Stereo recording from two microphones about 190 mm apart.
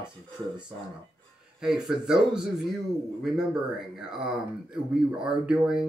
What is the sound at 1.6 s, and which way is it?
Speech, centre (ahead or behind).